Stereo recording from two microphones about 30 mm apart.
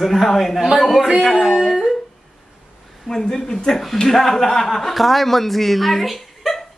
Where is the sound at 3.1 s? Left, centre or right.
Centre.